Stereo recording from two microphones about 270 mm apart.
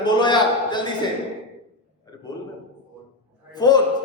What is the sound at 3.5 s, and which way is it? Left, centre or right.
Speech, centre.